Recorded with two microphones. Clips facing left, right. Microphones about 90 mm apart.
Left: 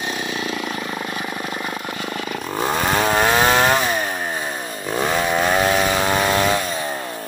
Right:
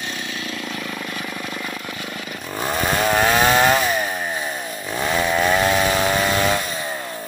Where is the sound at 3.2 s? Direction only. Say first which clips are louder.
Right 1 dB; 20° left (ahead or behind).